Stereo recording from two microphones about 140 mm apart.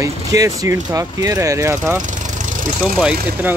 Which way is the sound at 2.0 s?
65° right (ahead or behind).